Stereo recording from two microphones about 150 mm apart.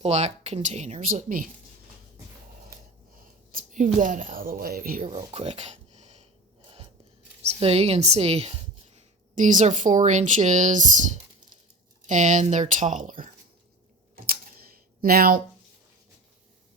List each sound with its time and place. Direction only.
0.0 s speech: 45° right (ahead or behind)
3.5 s speech: 60° right (ahead or behind)
5.0 s speech: 40° right (ahead or behind)
7.4 s speech: 40° right (ahead or behind)
9.0 s speech: 55° right (ahead or behind)
15.0 s speech: 85° right